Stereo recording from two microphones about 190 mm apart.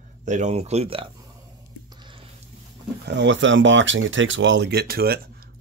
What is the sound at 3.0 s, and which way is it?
Speech, 70° right (ahead or behind).